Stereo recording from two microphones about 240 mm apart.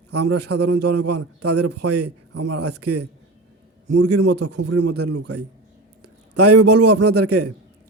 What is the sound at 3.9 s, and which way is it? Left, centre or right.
A man's voice, right.